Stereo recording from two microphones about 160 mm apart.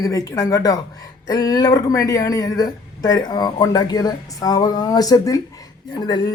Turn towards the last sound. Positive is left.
turn(degrees=25)  # may be behind; listen again after turning